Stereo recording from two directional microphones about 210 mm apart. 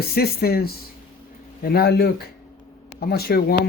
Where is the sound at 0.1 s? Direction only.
45° left (ahead or behind).